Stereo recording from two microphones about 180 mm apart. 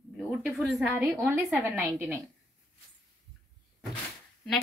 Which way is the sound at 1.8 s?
15° right (ahead or behind).